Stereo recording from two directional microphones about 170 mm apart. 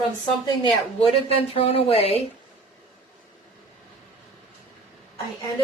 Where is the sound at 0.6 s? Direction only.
35° left (ahead or behind).